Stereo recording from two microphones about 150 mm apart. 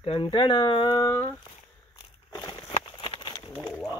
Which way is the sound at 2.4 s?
25° left (ahead or behind).